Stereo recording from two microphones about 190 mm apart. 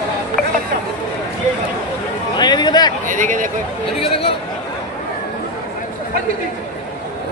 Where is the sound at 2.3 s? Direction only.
25° left (ahead or behind).